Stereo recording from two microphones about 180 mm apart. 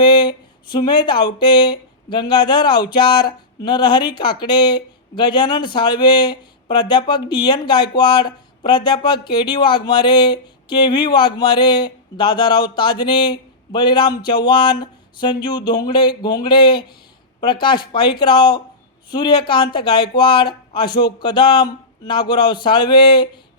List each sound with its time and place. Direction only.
0.0 s speech: 25° left (ahead or behind)